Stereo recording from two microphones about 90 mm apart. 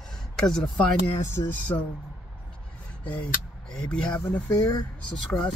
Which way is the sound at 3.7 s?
10° left (ahead or behind).